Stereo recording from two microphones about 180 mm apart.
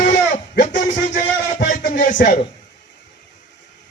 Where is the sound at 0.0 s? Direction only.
45° left (ahead or behind).